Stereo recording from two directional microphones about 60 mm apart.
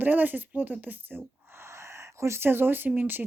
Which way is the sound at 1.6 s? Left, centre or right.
Right.